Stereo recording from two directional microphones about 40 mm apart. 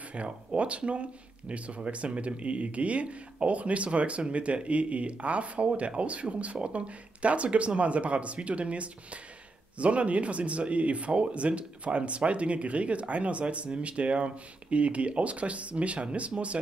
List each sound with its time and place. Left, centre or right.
0.2 s speech: right